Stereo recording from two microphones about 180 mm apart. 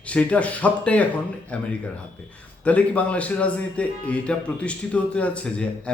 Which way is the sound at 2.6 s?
10° left (ahead or behind).